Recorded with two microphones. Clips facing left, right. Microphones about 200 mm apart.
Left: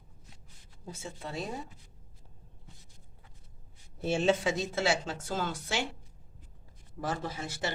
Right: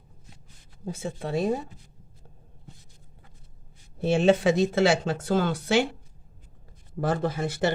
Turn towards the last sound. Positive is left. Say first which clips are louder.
# right 10 dB
turn(degrees=-60)  # may be behind; listen again after turning